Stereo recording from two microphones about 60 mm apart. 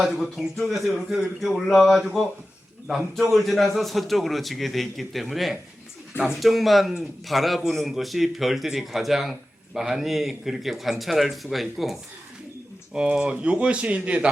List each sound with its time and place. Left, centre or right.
0.0 s a man's voice: centre
12.9 s speech: centre